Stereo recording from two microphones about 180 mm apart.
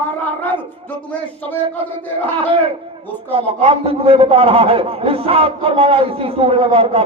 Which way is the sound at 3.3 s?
30° right (ahead or behind).